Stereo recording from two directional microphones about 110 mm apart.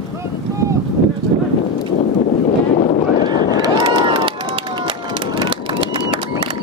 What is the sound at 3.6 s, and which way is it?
Run, 40° right (ahead or behind).